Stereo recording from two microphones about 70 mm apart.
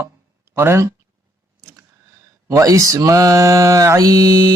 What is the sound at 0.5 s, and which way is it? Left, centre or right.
Speech, right.